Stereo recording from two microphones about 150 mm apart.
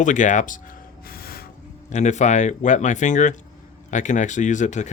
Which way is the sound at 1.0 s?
80° left.